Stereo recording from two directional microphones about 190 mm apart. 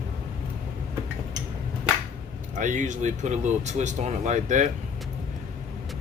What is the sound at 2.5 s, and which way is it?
Speech, 40° right (ahead or behind).